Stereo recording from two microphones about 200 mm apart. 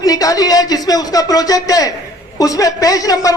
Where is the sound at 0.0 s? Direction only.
15° left (ahead or behind).